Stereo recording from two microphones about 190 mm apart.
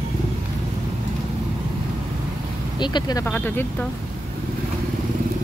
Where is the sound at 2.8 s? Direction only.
20° left (ahead or behind).